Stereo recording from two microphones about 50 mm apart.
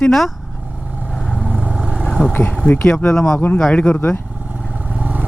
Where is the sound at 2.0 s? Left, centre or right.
Centre.